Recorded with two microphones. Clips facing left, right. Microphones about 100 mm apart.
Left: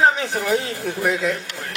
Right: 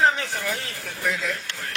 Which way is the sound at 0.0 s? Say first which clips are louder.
Left 4 dB; 20° left (ahead or behind).